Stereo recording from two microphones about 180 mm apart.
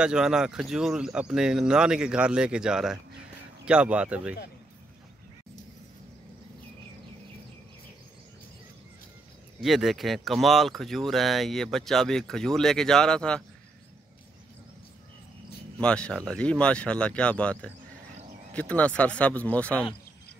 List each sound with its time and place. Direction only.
0.0 s speech: 5° right (ahead or behind)
9.6 s speech: centre (ahead or behind)
15.8 s speech: 5° left (ahead or behind)